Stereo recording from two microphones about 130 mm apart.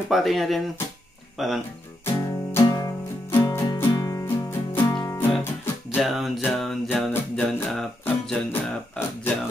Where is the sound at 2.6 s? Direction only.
30° left (ahead or behind).